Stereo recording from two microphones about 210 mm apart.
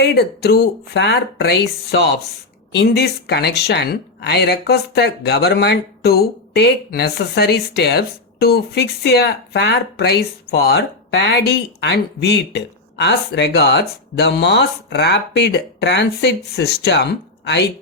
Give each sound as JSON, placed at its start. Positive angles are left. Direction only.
{"t": 0.0, "sound": "speech", "side_deg": 50}